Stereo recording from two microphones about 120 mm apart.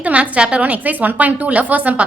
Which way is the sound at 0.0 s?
10° right (ahead or behind).